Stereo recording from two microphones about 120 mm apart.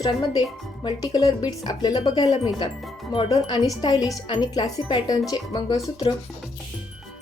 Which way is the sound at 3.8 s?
35° left (ahead or behind).